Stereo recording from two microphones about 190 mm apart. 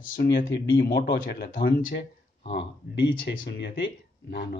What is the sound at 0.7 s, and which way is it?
Speech, 55° left (ahead or behind).